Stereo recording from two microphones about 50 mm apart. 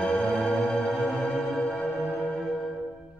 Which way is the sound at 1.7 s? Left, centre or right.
Centre.